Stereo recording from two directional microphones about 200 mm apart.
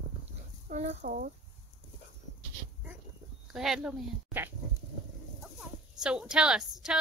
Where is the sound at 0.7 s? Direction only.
35° right (ahead or behind).